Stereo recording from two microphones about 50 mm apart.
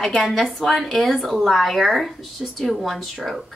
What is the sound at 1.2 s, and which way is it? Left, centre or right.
A woman's voice, centre.